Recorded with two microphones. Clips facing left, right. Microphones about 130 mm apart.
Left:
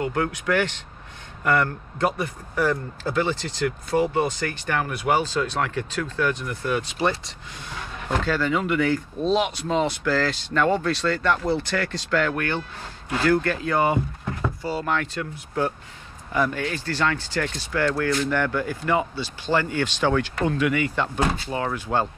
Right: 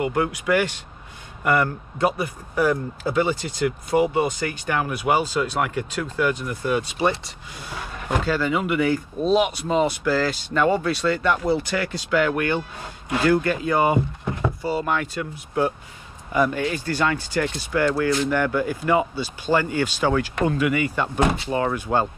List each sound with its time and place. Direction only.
0.0 s speech: 10° right (ahead or behind)
21.2 s speech: 20° right (ahead or behind)